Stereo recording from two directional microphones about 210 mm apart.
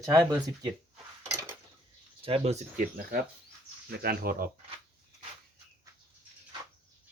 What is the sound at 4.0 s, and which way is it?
Speech, 45° right (ahead or behind).